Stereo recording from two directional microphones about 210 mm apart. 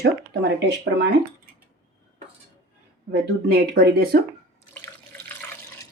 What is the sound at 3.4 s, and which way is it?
Speech, 50° right (ahead or behind).